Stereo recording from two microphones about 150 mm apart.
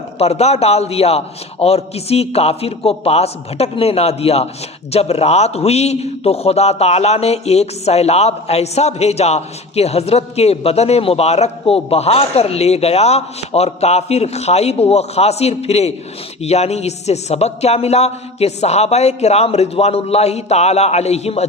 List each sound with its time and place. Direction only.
0.2 s a man's voice: 45° left (ahead or behind)